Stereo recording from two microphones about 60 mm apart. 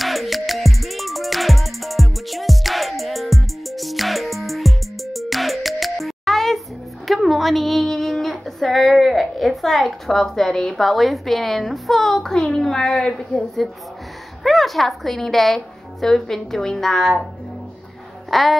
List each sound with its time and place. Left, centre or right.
0.0 s music: centre
7.1 s a woman's voice: centre
18.3 s a sound: centre